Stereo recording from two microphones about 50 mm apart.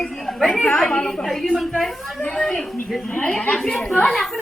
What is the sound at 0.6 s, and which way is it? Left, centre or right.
Speech, left.